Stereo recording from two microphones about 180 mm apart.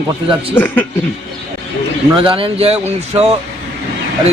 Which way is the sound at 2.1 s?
30° right (ahead or behind).